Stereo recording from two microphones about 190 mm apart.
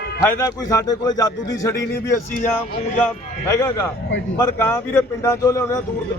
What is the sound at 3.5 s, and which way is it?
A man's voice, 15° left (ahead or behind).